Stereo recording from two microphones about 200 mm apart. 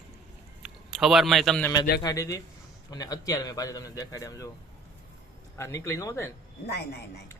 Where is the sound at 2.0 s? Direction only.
15° left (ahead or behind).